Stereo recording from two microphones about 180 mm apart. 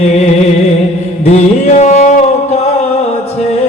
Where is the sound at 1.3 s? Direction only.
40° left (ahead or behind).